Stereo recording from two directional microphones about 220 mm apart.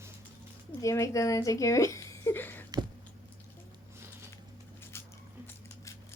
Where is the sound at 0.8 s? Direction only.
15° left (ahead or behind).